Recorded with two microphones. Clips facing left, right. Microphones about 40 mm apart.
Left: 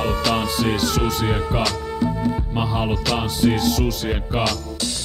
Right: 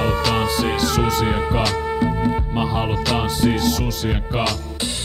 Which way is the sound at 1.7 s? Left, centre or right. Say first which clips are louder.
Right 3 dB; right.